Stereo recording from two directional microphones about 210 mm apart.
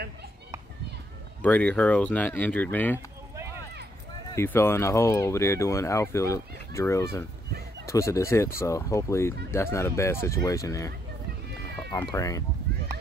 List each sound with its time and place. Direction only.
1.4 s speech: 5° left (ahead or behind)
4.4 s speech: 10° left (ahead or behind)
11.9 s speech: 15° left (ahead or behind)